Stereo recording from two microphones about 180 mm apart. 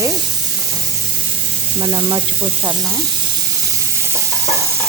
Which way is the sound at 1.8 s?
20° right (ahead or behind).